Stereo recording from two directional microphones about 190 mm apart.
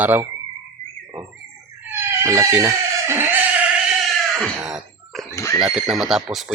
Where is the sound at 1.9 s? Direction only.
15° right (ahead or behind).